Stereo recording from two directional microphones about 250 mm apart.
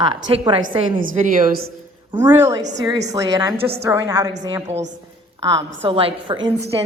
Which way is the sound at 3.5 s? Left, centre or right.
Right.